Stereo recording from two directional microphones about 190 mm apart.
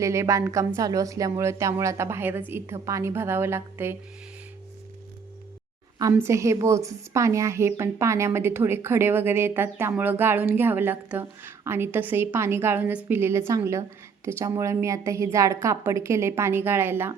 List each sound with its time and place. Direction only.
0.0 s a woman's voice: 15° right (ahead or behind)
6.0 s a woman's voice: 15° right (ahead or behind)